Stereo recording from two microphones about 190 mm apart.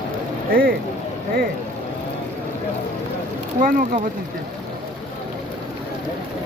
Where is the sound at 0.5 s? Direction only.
50° right (ahead or behind).